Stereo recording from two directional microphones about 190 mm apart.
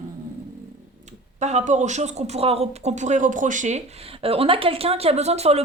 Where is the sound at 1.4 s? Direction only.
35° right (ahead or behind).